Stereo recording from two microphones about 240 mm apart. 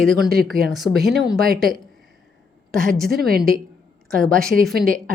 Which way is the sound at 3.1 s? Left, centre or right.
Right.